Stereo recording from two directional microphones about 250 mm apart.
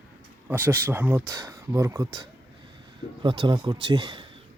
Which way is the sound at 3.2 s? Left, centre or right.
Centre.